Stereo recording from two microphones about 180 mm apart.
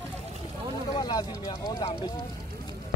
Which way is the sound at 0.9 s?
20° left (ahead or behind).